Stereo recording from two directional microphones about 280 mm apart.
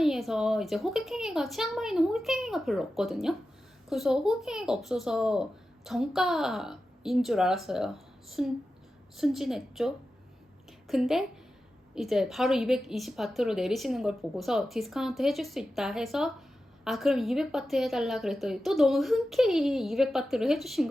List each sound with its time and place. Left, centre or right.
0.0 s a woman's voice: centre